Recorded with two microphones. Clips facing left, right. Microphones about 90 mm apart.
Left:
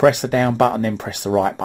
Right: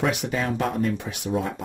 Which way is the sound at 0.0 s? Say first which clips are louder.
Left 10 dB; 70° left (ahead or behind).